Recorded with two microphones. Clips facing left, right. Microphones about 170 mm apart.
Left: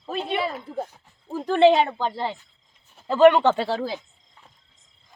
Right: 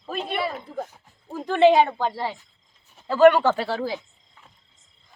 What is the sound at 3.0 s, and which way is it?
Speech, 20° left (ahead or behind).